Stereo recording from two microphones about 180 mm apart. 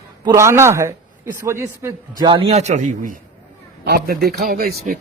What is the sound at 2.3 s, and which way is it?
Speech, 30° right (ahead or behind).